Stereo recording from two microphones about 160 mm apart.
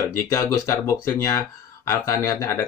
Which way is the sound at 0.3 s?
20° left (ahead or behind).